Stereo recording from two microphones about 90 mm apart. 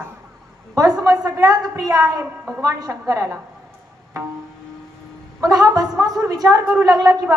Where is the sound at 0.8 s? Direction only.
40° right (ahead or behind).